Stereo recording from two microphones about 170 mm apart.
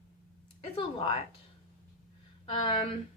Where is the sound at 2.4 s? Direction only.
30° left (ahead or behind).